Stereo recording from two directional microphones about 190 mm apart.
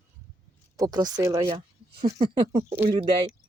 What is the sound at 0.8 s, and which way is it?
Speech, 20° right (ahead or behind).